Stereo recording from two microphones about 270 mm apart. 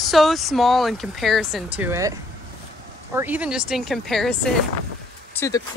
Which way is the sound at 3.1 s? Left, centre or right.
Centre.